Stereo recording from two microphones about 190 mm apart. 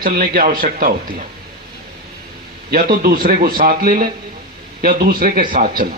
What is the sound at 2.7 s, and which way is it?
A man's voice, 50° right (ahead or behind).